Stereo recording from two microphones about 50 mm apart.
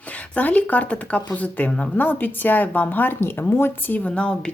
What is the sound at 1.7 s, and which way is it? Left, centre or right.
Speech, centre.